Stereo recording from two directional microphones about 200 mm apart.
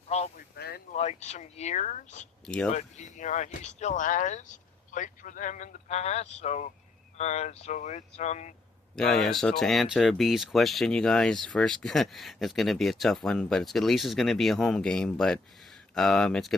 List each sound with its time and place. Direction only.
0.1 s a sound: 30° left (ahead or behind)
0.5 s a sound: 50° left (ahead or behind)
0.9 s speech: 35° left (ahead or behind)
2.5 s speech: 5° left (ahead or behind)
2.7 s speech: 35° left (ahead or behind)
9.0 s speech: centre (ahead or behind)